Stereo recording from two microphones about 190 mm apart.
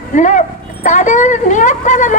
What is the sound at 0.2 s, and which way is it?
A woman's voice, 40° left (ahead or behind).